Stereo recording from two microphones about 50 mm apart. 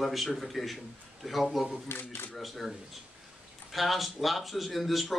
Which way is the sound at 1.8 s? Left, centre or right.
Left.